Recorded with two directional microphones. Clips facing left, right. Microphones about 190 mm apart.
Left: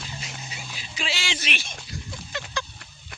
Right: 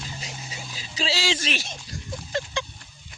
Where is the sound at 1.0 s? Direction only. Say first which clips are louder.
Right 6 dB; 35° right (ahead or behind).